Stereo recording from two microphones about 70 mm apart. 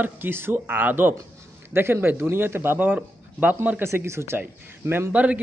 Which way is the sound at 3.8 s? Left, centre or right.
Right.